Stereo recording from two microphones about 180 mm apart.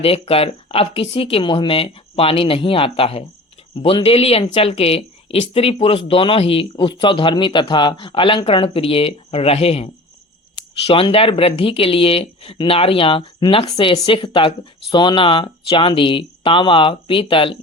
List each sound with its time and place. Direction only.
0.0 s speech: 30° left (ahead or behind)